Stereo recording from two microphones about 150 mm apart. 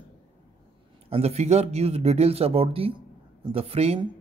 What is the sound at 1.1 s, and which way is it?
Speech, 45° right (ahead or behind).